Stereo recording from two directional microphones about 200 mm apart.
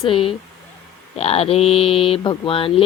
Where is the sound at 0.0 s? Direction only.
25° left (ahead or behind).